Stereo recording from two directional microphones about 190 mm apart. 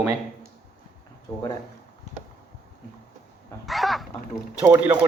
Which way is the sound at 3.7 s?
Centre (ahead or behind).